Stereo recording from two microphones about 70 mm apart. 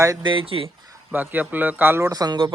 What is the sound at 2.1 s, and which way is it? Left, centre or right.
Speech, right.